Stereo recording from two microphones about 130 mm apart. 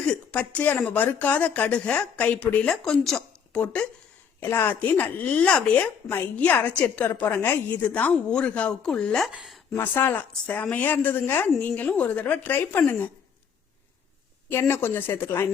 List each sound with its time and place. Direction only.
0.1 s a woman's voice: 10° left (ahead or behind)
9.7 s speech: 15° left (ahead or behind)
14.5 s speech: 15° left (ahead or behind)